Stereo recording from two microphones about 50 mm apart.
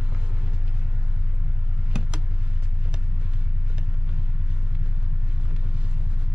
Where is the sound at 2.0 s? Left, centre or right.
Centre.